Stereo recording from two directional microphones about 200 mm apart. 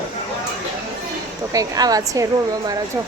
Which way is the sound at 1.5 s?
20° right (ahead or behind).